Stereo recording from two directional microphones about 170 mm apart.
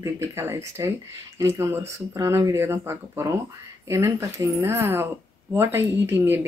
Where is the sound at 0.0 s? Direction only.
15° right (ahead or behind).